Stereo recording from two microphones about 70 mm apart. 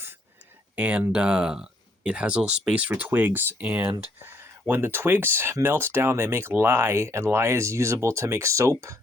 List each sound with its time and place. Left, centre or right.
0.8 s speech: right
1.1 s speech: centre
3.0 s speech: right